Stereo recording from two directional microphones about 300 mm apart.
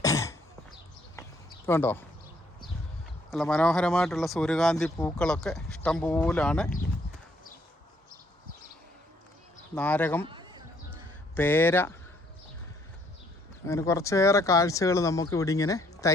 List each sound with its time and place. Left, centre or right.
0.0 s cough: centre
1.6 s speech: centre
3.2 s speech: centre
9.7 s speech: centre
10.2 s a sound: centre
11.3 s speech: centre
13.7 s speech: centre